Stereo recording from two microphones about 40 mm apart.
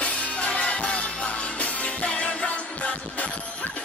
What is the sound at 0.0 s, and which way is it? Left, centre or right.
Music, left.